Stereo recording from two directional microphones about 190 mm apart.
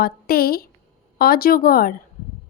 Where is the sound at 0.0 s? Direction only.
55° left (ahead or behind).